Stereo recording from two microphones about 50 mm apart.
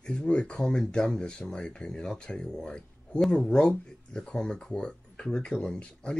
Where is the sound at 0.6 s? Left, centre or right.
Centre.